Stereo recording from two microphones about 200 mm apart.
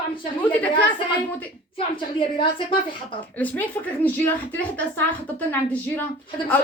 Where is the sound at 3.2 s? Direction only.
10° left (ahead or behind).